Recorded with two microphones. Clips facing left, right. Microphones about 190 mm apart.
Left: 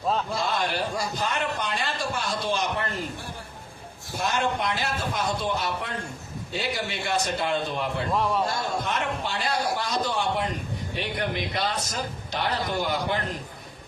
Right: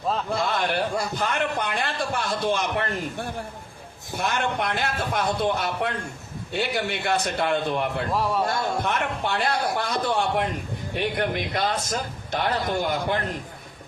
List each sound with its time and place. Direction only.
0.3 s a man's voice: 55° right (ahead or behind)
4.2 s a man's voice: 60° right (ahead or behind)
8.1 s a man's voice: 5° right (ahead or behind)
8.4 s a man's voice: 60° right (ahead or behind)